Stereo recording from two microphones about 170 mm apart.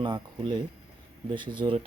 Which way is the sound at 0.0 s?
30° right (ahead or behind).